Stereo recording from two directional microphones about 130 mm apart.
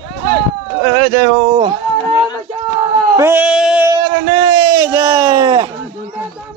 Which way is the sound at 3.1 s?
20° right (ahead or behind).